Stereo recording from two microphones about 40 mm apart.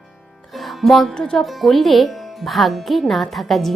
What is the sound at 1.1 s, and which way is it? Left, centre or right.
Speech, centre.